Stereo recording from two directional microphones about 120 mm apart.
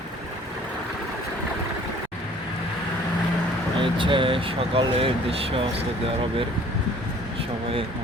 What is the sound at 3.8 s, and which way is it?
Speech, 45° right (ahead or behind).